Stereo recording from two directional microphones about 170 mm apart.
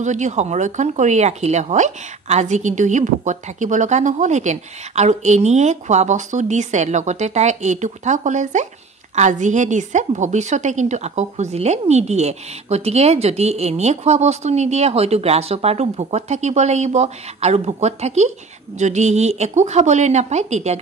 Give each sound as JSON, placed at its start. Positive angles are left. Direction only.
{"t": 0.0, "sound": "a woman's voice", "side_deg": -45}